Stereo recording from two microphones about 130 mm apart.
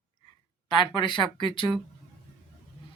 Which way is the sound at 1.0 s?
40° left (ahead or behind).